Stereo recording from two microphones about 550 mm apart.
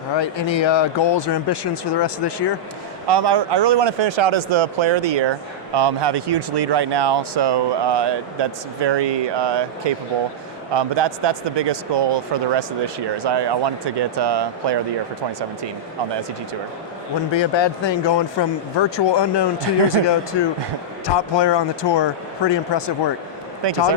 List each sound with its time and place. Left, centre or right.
0.2 s speech: left
3.1 s speech: right
17.3 s speech: left
23.6 s speech: right